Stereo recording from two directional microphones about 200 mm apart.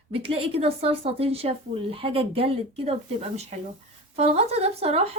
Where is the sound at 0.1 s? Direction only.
30° right (ahead or behind).